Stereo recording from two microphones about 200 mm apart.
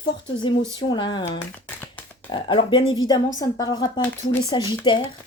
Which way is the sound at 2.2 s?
25° left (ahead or behind).